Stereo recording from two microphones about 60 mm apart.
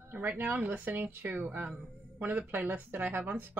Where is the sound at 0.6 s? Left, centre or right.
Right.